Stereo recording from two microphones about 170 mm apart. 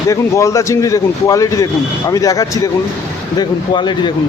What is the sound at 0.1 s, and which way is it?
Speech, 15° left (ahead or behind).